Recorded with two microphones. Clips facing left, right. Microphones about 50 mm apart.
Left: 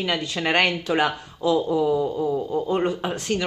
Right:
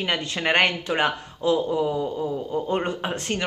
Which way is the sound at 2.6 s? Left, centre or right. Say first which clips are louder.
Left 2 dB; right.